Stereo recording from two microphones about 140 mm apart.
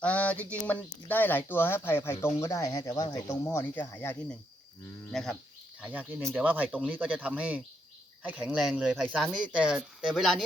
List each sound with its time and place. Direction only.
0.0 s speech: 10° left (ahead or behind)
5.1 s speech: centre (ahead or behind)
5.8 s speech: 10° right (ahead or behind)